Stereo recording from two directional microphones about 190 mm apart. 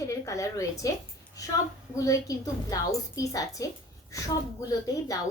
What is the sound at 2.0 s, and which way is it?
A woman's voice, 15° left (ahead or behind).